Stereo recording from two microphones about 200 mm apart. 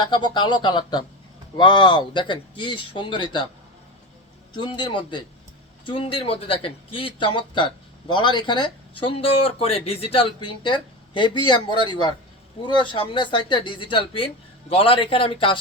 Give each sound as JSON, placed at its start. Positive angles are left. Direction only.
{"t": 0.0, "sound": "a man's voice", "side_deg": 20}
{"t": 4.5, "sound": "a man's voice", "side_deg": 25}